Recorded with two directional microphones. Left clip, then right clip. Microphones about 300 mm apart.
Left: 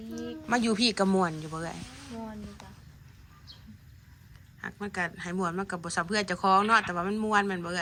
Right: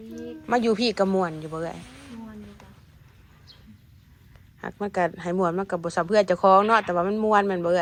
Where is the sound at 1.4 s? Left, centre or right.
Centre.